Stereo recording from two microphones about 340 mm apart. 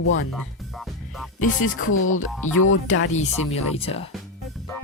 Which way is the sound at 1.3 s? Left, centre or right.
Left.